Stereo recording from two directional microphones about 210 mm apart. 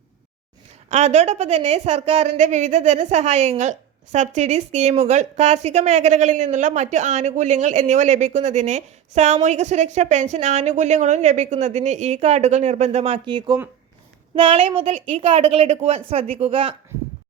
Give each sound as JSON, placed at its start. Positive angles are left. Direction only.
{"t": 0.9, "sound": "a woman's voice", "side_deg": -30}